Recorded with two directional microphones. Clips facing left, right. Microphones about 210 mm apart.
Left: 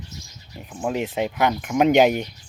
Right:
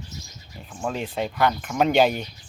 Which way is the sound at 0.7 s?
15° left (ahead or behind).